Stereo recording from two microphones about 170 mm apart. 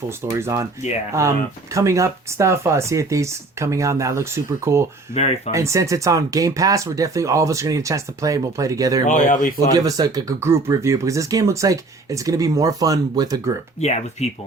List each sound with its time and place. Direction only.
0.2 s speech: 15° right (ahead or behind)
1.7 s speech: 20° right (ahead or behind)
5.1 s speech: 50° left (ahead or behind)
5.5 s speech: 20° right (ahead or behind)
9.0 s speech: 50° left (ahead or behind)
9.7 s speech: 20° right (ahead or behind)
13.8 s speech: 40° left (ahead or behind)